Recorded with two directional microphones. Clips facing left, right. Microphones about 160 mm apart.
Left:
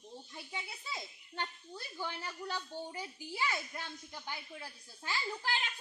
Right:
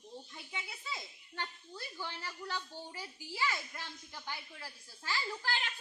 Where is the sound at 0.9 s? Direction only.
15° left (ahead or behind).